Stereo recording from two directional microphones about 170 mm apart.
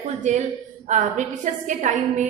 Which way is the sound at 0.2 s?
45° right (ahead or behind).